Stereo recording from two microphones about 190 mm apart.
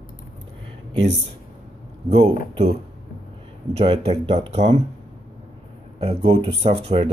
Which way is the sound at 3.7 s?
30° right (ahead or behind).